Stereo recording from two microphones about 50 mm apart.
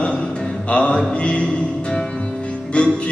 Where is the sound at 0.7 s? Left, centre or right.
Left.